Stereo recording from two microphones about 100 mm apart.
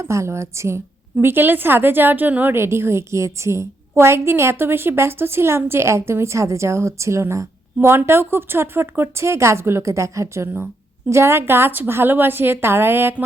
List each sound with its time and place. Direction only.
0.0 s a woman's voice: 30° right (ahead or behind)